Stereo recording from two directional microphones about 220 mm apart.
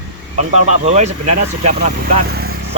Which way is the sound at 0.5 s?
30° right (ahead or behind).